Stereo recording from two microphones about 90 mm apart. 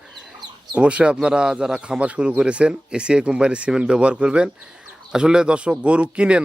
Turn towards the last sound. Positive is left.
turn(degrees=-10)  # may be behind; listen again after turning